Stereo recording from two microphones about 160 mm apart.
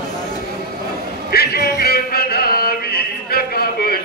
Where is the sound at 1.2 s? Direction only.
70° left (ahead or behind).